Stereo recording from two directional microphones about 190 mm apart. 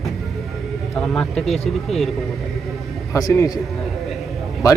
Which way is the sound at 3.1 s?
15° left (ahead or behind).